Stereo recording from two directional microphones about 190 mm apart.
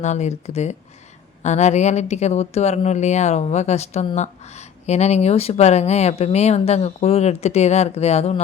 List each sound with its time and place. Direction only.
0.0 s speech: 40° left (ahead or behind)